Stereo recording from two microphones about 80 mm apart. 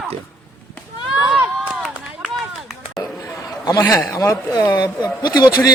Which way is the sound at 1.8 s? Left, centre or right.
Centre.